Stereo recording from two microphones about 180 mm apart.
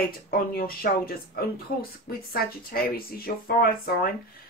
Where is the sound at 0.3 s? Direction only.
55° left (ahead or behind).